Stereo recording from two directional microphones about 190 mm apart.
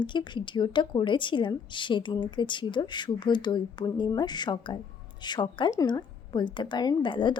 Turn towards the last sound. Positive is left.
turn(degrees=25)  # may be behind; listen again after turning